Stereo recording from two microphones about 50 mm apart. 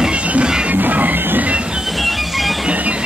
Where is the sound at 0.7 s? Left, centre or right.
Right.